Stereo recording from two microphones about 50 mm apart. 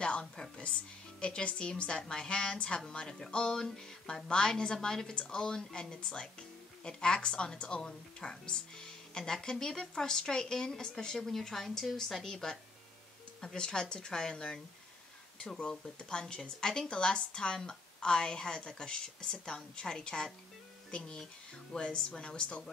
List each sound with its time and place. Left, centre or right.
0.0 s a woman's voice: centre